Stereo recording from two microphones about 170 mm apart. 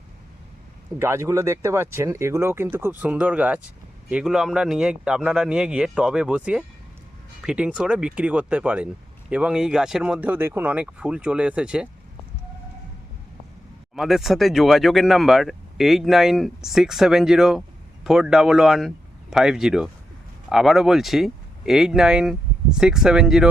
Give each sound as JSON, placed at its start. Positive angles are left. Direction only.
{"t": 0.9, "sound": "speech", "side_deg": -15}
{"t": 13.9, "sound": "speech", "side_deg": 0}